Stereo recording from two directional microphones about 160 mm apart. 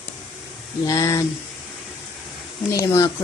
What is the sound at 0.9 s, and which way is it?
Speech, 20° left (ahead or behind).